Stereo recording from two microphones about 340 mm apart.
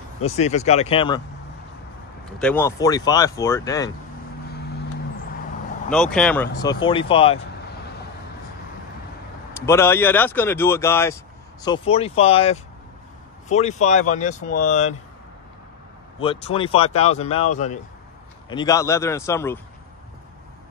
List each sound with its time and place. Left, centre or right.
0.2 s speech: centre
2.3 s speech: centre
5.9 s speech: centre
9.7 s speech: centre
16.2 s speech: centre